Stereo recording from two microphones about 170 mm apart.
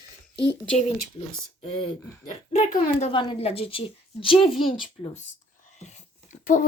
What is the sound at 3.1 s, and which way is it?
Speech, 30° left (ahead or behind).